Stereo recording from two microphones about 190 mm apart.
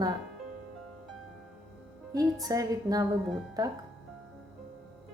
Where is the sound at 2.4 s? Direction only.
20° right (ahead or behind).